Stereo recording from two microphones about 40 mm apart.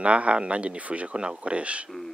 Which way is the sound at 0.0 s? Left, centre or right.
Right.